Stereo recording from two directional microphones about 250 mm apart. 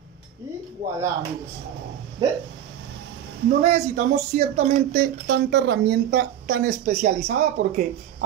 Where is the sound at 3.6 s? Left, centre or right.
Right.